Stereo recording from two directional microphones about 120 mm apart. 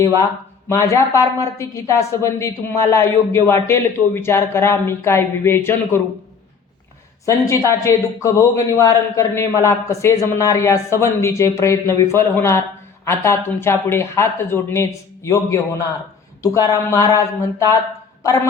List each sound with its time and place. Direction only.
0.7 s a woman's voice: 25° left (ahead or behind)
7.3 s a woman's voice: 25° left (ahead or behind)